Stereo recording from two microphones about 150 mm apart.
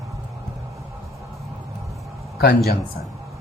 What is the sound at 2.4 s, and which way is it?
Speech, 90° left.